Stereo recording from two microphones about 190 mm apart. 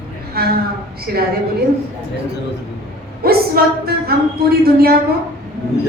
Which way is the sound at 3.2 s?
55° right (ahead or behind).